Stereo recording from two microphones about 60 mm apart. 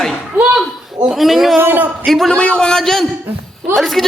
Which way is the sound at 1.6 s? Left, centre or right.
Right.